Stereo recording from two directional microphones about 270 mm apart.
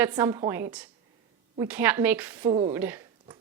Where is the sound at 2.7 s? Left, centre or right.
Centre.